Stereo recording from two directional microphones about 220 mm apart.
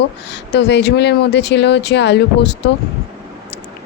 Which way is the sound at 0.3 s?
50° left (ahead or behind).